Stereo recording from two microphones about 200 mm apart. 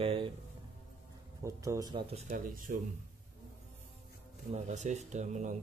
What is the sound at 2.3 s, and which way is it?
Speech, 45° right (ahead or behind).